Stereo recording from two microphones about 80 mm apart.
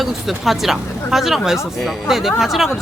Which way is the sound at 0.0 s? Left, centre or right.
Centre.